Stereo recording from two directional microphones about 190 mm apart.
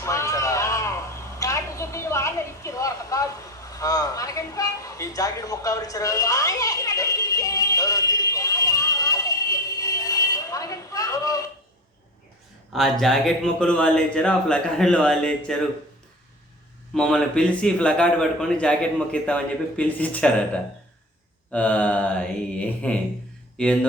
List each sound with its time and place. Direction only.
0.0 s a sound: 15° left (ahead or behind)
1.4 s vehicle: 15° left (ahead or behind)
3.7 s a sound: 20° left (ahead or behind)
12.7 s a man's voice: centre (ahead or behind)
16.9 s a man's voice: 5° left (ahead or behind)
21.5 s mantra: 5° left (ahead or behind)
23.6 s a man's voice: 5° left (ahead or behind)